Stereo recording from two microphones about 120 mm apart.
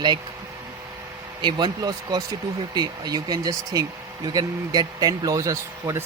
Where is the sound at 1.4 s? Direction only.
40° right (ahead or behind).